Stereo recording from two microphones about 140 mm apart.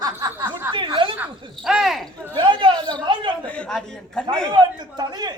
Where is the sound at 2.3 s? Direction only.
35° right (ahead or behind).